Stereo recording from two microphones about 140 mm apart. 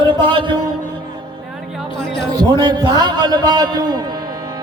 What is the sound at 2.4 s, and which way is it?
Music, 30° right (ahead or behind).